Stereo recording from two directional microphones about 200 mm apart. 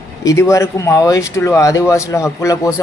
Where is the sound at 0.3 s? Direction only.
15° left (ahead or behind).